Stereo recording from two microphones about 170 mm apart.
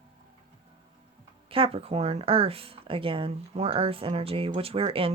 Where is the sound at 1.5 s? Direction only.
35° right (ahead or behind).